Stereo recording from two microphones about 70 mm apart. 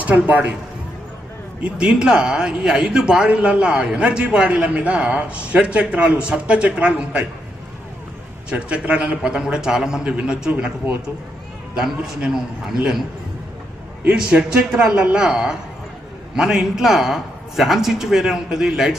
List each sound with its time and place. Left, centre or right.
0.0 s speech: right
1.6 s a man's voice: centre
8.4 s a man's voice: centre
14.2 s a man's voice: centre